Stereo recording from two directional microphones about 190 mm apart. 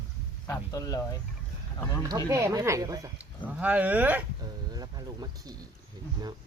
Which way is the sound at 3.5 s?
10° right (ahead or behind).